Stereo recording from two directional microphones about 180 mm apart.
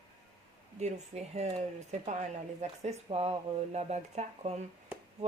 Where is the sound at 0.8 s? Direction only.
40° right (ahead or behind).